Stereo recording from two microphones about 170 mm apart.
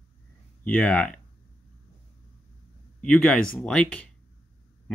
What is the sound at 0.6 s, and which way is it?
Speech, 10° left (ahead or behind).